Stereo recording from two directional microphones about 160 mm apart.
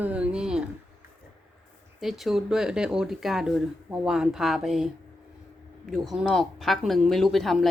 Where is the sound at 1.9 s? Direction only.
Centre (ahead or behind).